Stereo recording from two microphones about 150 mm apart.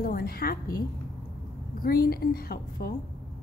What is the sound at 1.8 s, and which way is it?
A woman's voice, 80° left.